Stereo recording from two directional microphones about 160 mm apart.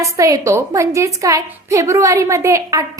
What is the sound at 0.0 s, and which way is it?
A woman's voice, 20° right (ahead or behind).